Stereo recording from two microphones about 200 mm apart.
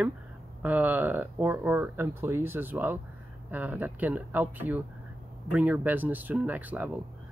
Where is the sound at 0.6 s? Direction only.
10° right (ahead or behind).